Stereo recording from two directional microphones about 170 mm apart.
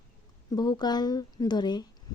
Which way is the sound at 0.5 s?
25° left (ahead or behind).